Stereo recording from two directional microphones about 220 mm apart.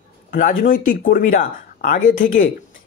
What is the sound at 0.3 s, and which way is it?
Speech, 40° left (ahead or behind).